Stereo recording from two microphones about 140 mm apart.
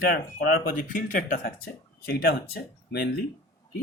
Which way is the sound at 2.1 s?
90° left.